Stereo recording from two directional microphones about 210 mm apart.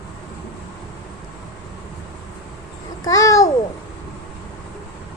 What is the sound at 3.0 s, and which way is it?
Babbling, 15° left (ahead or behind).